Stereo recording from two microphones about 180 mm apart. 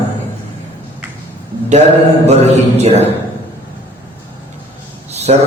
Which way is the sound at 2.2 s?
35° right (ahead or behind).